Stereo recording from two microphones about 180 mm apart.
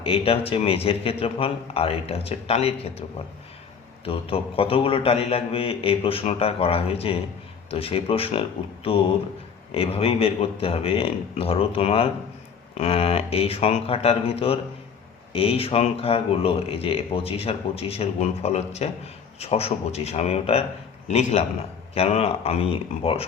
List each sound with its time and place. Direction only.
0.0 s speech: 30° left (ahead or behind)
4.0 s speech: 30° left (ahead or behind)